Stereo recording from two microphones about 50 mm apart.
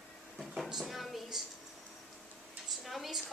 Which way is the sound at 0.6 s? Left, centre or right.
Centre.